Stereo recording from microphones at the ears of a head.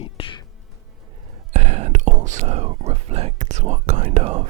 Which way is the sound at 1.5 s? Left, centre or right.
Right.